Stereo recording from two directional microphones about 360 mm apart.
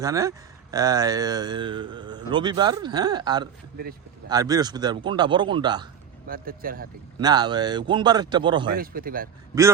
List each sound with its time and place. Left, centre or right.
0.0 s speech: centre
6.2 s speech: right
7.2 s speech: centre
8.8 s speech: right